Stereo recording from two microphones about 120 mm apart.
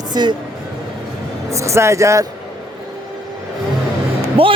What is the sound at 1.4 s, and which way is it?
Speech, 25° right (ahead or behind).